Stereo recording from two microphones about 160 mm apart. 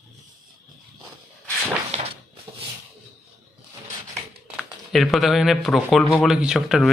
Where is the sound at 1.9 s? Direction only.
45° right (ahead or behind).